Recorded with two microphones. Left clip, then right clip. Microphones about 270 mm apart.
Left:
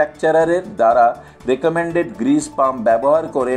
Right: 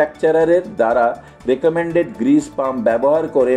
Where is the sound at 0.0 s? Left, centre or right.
Centre.